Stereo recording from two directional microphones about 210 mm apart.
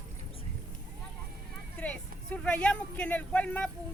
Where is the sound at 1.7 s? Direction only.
5° left (ahead or behind).